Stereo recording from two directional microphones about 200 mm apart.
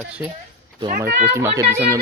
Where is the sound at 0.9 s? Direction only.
50° right (ahead or behind).